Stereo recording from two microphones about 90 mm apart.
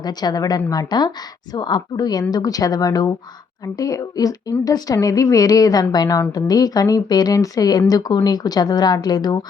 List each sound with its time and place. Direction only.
0.0 s a woman's voice: 50° left (ahead or behind)